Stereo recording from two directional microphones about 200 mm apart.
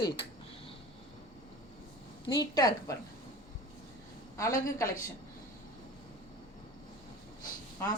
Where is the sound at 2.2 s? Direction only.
20° left (ahead or behind).